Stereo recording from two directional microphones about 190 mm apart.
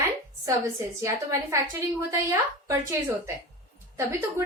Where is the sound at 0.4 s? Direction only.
15° right (ahead or behind).